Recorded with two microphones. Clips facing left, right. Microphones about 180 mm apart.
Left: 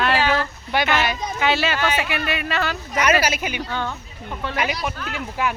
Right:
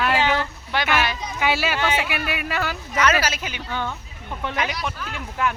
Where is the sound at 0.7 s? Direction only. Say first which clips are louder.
Left 3 dB; 15° left (ahead or behind).